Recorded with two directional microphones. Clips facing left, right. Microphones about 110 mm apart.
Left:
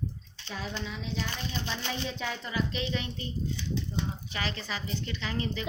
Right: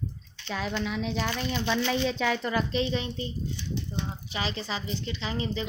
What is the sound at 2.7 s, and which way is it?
Speech, 30° right (ahead or behind).